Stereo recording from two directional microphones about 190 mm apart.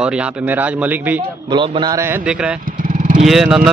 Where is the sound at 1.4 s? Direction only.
25° right (ahead or behind).